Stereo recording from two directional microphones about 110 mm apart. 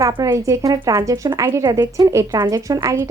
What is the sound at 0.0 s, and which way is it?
Speech, 30° right (ahead or behind).